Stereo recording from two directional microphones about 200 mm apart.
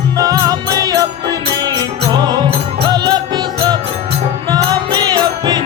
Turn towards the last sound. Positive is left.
turn(degrees=-20)  # may be behind; listen again after turning